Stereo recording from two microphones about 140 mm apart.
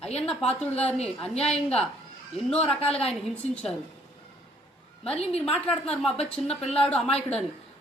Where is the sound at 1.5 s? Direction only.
5° left (ahead or behind).